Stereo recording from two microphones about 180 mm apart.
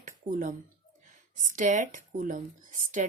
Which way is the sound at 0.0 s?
45° right (ahead or behind).